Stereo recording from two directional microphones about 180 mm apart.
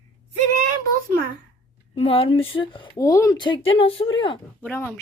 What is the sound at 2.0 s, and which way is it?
Speech, 30° left (ahead or behind).